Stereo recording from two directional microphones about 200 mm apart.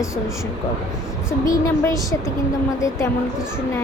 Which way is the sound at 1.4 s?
15° left (ahead or behind).